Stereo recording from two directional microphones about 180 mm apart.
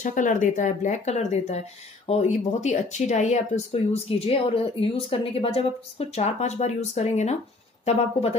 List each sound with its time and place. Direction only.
0.0 s speech: 45° left (ahead or behind)